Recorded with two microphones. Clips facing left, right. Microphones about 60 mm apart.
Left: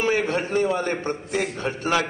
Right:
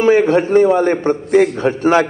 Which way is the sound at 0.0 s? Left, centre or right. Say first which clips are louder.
Right 11 dB; right.